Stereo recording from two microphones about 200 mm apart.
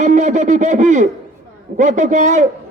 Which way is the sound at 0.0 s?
35° right (ahead or behind).